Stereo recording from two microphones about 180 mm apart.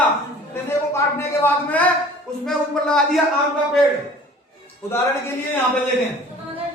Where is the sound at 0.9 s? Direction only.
15° left (ahead or behind).